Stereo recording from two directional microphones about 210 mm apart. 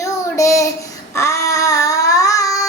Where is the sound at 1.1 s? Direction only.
15° left (ahead or behind).